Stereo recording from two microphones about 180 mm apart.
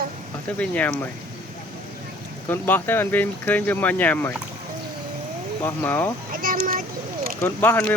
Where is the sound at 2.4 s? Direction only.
10° left (ahead or behind).